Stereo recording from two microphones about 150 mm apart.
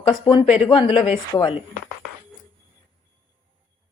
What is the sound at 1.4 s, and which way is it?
Speech, 35° left (ahead or behind).